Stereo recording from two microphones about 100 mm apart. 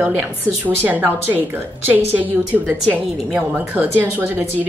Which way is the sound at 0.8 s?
15° right (ahead or behind).